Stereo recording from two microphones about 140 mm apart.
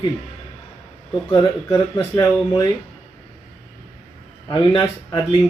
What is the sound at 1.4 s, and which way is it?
Speech, 35° left (ahead or behind).